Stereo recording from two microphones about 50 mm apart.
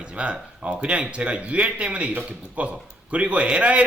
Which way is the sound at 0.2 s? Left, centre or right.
Right.